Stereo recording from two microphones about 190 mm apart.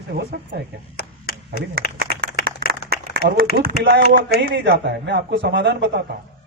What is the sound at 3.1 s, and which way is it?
Speech, 55° right (ahead or behind).